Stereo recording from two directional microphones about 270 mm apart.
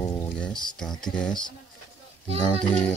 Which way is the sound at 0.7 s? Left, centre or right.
Centre.